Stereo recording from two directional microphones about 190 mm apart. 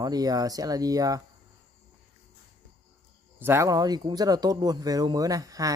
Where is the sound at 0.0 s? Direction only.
20° right (ahead or behind).